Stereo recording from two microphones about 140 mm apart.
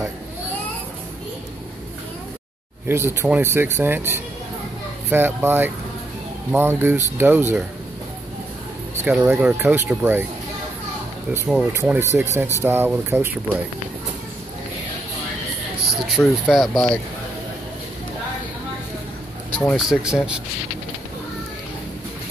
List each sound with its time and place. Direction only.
2.9 s speech: 20° right (ahead or behind)
9.0 s speech: 10° right (ahead or behind)
11.4 s speech: 5° right (ahead or behind)
16.1 s speech: centre (ahead or behind)
19.5 s speech: 10° left (ahead or behind)
19.8 s speech: 5° right (ahead or behind)